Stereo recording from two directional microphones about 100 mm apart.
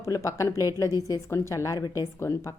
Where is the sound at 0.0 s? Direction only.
30° left (ahead or behind).